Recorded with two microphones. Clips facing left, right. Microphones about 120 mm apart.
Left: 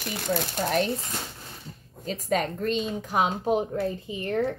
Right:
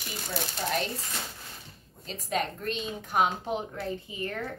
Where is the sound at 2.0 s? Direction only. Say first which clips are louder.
Left 5 dB; 45° left (ahead or behind).